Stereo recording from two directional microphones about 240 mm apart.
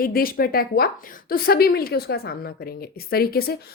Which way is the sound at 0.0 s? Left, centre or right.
Left.